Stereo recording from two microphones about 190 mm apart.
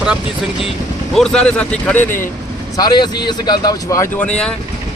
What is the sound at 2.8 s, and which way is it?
Speech, 20° left (ahead or behind).